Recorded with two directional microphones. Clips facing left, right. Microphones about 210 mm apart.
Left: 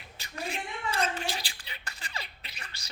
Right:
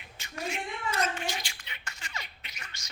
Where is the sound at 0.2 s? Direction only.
35° left (ahead or behind).